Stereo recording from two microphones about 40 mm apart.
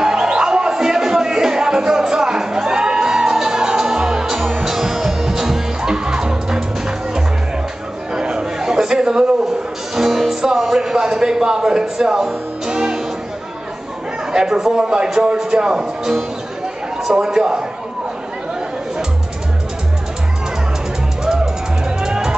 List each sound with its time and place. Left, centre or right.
0.0 s music: centre
8.1 s chatter: right
9.9 s speech: centre
12.6 s music: centre
14.3 s a man's voice: centre
15.7 s a man's voice: centre
21.8 s music: centre